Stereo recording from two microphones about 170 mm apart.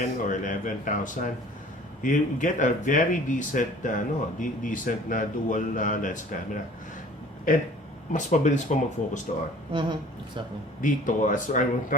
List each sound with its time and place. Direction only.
0.0 s speech: 50° left (ahead or behind)
8.1 s speech: 45° left (ahead or behind)
9.7 s a woman's voice: 25° right (ahead or behind)
10.8 s speech: 50° left (ahead or behind)